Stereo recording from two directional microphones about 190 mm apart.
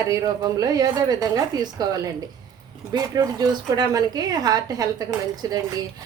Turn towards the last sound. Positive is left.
turn(degrees=-20)  # may be behind; listen again after turning